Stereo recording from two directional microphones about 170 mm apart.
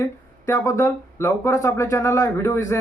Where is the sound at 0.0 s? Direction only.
15° left (ahead or behind).